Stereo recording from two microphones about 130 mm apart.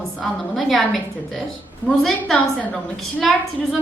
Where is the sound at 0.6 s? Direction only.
Centre (ahead or behind).